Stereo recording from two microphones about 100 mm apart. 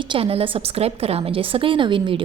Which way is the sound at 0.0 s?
60° right (ahead or behind).